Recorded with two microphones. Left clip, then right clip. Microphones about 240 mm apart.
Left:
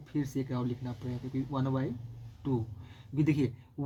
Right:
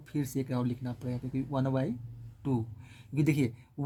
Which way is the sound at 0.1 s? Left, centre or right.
Right.